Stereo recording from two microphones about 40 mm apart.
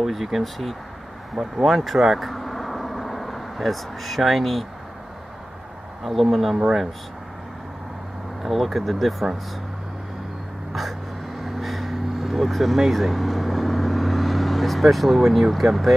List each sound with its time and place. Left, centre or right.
0.0 s speech: centre
6.5 s speech: centre
8.4 s speech: centre
10.7 s vehicle: centre
15.5 s speech: centre